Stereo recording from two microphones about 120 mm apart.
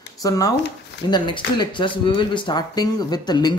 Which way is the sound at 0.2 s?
30° left (ahead or behind).